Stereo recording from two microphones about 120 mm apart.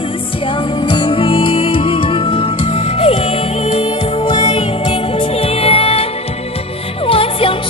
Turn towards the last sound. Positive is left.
turn(degrees=50)  # may be behind; listen again after turning